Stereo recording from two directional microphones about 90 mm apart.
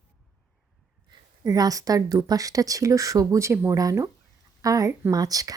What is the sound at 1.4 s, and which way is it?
A woman's voice, 40° right (ahead or behind).